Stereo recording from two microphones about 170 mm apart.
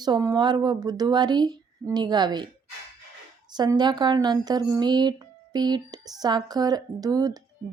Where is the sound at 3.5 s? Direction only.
25° right (ahead or behind).